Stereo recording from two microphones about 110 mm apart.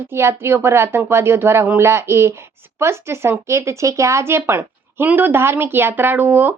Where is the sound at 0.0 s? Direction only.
20° right (ahead or behind).